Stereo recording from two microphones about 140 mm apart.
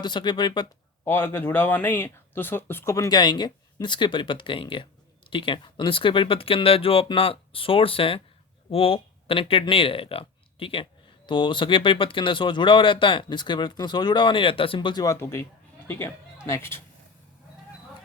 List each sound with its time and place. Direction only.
0.0 s speech: 35° left (ahead or behind)
1.0 s speech: 15° left (ahead or behind)
16.5 s speech: 20° left (ahead or behind)